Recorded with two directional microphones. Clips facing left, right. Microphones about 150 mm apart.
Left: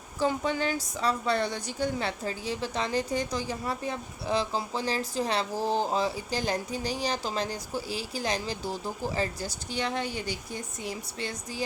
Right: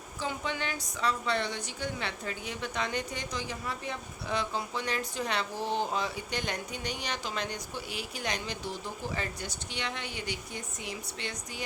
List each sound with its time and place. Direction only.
0.2 s a woman's voice: 40° left (ahead or behind)